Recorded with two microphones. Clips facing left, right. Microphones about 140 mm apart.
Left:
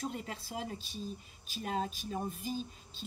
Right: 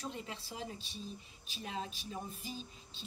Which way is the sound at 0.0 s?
45° left (ahead or behind).